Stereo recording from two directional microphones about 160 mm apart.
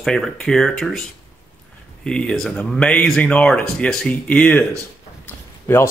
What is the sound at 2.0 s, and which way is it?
Speech, 5° left (ahead or behind).